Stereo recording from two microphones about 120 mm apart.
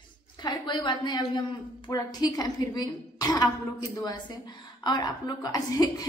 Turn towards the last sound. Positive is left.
turn(degrees=30)  # may be behind; listen again after turning